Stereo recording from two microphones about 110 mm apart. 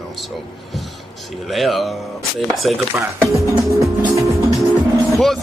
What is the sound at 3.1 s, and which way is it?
Speech, 30° right (ahead or behind).